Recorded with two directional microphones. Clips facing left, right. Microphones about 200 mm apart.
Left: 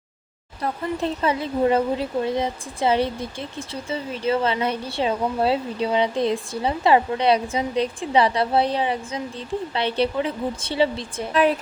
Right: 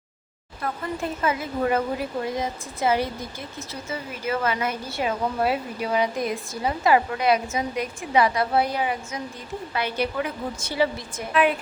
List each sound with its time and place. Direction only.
0.6 s speech: 30° left (ahead or behind)